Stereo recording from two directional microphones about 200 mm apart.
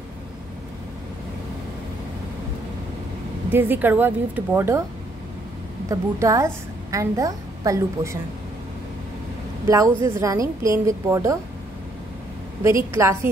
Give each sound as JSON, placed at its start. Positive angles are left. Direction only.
{"t": 3.5, "sound": "a woman's voice", "side_deg": -10}
{"t": 5.9, "sound": "a woman's voice", "side_deg": -15}
{"t": 9.7, "sound": "a woman's voice", "side_deg": -15}
{"t": 12.6, "sound": "a woman's voice", "side_deg": -15}